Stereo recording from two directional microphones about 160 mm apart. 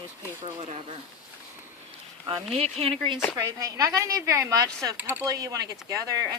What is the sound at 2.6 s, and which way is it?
Speech, 40° right (ahead or behind).